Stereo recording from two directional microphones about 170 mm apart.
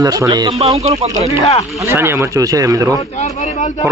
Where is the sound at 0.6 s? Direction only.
40° right (ahead or behind).